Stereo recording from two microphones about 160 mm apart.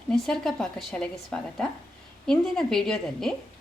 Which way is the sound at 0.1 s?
Centre (ahead or behind).